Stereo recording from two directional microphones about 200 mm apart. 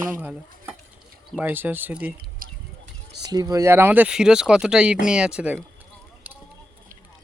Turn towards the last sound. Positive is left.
turn(degrees=-5)  # may be behind; listen again after turning